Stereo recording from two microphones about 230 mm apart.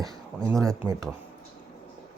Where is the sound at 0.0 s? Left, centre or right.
Centre.